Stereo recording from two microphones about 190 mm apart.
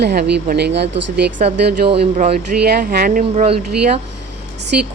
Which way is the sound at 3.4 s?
30° right (ahead or behind).